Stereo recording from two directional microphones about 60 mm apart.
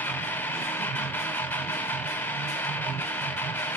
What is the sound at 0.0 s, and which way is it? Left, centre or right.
Music, left.